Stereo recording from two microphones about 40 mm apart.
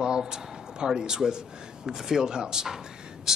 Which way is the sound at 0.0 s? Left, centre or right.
Centre.